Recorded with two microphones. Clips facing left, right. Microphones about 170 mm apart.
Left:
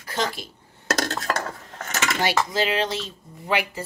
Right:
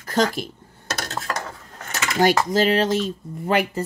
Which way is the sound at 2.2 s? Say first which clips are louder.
Right 7 dB; 45° right (ahead or behind).